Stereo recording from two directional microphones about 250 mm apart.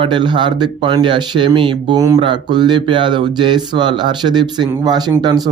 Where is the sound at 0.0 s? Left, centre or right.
Centre.